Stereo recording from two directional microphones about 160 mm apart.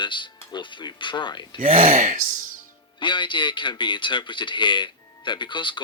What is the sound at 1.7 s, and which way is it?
Speech, 55° right (ahead or behind).